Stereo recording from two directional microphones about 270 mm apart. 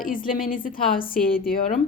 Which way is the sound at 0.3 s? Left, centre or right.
Left.